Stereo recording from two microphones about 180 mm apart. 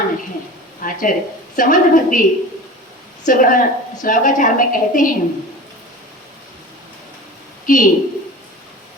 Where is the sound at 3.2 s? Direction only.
50° left (ahead or behind).